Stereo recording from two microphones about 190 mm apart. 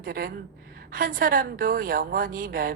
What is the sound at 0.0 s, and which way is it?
A woman's voice, 50° right (ahead or behind).